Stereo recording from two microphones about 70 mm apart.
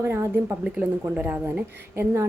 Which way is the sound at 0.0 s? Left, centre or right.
Right.